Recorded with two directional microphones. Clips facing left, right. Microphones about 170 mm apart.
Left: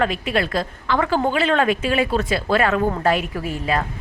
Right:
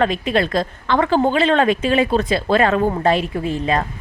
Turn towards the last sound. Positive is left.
turn(degrees=-25)  # may be behind; listen again after turning